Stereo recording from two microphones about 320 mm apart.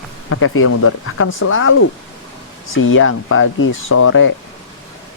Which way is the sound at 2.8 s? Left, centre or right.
Left.